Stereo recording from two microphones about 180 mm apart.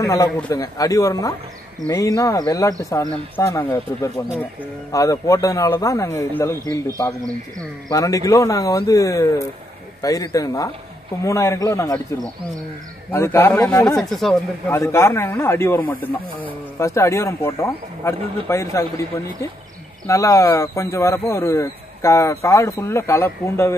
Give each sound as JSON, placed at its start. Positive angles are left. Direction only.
{"t": 0.0, "sound": "speech", "side_deg": 20}
{"t": 7.9, "sound": "speech", "side_deg": 20}
{"t": 13.1, "sound": "speech", "side_deg": 15}
{"t": 13.9, "sound": "speech", "side_deg": 0}
{"t": 14.7, "sound": "speech", "side_deg": 15}
{"t": 20.1, "sound": "speech", "side_deg": 15}